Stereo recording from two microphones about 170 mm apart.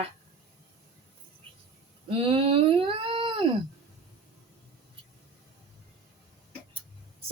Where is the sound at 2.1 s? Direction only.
30° right (ahead or behind).